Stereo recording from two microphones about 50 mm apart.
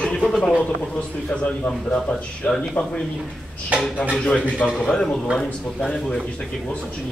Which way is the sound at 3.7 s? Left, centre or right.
Right.